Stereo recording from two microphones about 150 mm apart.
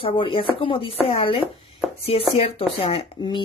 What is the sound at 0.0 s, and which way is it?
Speech, 35° left (ahead or behind).